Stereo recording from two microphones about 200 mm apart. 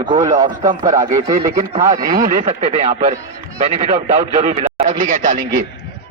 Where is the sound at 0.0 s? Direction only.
20° right (ahead or behind).